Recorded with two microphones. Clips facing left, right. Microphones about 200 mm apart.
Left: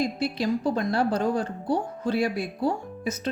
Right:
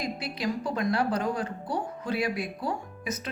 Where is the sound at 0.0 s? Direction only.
25° left (ahead or behind).